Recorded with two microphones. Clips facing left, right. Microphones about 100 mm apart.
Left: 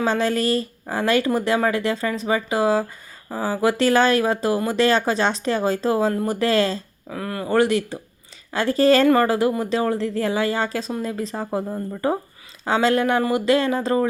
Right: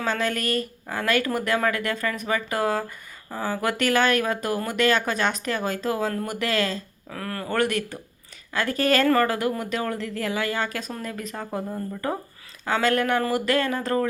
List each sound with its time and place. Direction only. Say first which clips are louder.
0.0 s speech: left 5 dB; 30° left (ahead or behind)
7.1 s speech: left 6 dB; 15° left (ahead or behind)